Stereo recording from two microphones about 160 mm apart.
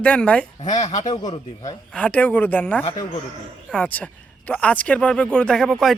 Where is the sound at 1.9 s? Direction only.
10° left (ahead or behind).